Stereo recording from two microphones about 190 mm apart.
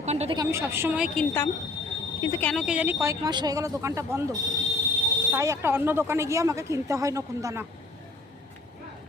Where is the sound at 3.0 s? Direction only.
20° right (ahead or behind).